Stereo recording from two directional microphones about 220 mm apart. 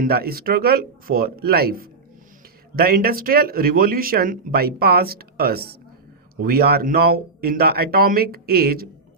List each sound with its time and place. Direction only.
0.0 s speech: 45° right (ahead or behind)